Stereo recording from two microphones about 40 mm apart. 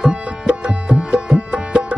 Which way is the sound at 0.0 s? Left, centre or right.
Right.